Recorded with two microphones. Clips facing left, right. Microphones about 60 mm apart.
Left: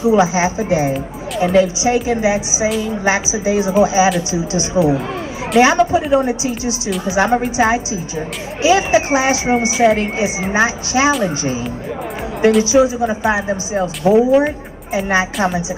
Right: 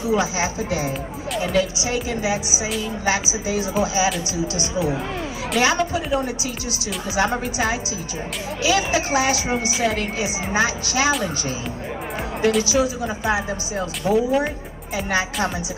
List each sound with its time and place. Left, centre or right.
0.0 s speech: left
12.7 s speech: left